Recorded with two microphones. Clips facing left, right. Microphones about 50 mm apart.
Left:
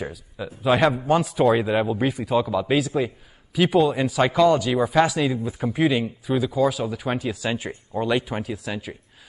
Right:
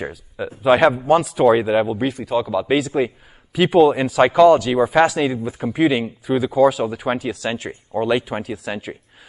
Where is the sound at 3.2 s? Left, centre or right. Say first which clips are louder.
Right 3 dB; centre.